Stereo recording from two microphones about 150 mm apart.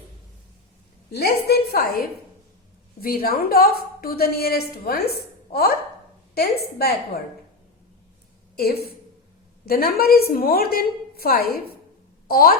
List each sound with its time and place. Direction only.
1.1 s a woman's voice: 90° left
8.5 s a woman's voice: 90° left